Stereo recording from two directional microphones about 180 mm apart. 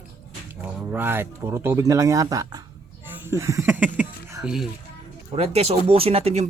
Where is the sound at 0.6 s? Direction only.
10° right (ahead or behind).